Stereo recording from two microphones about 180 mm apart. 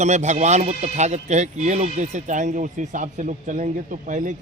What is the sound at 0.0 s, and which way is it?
A man's voice, 40° right (ahead or behind).